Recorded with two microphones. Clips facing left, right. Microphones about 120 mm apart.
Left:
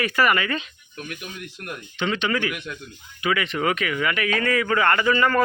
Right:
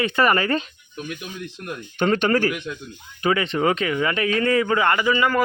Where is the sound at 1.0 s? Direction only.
20° right (ahead or behind).